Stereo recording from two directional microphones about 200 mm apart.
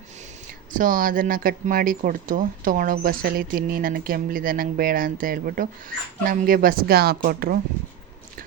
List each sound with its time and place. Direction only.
0.7 s speech: 40° right (ahead or behind)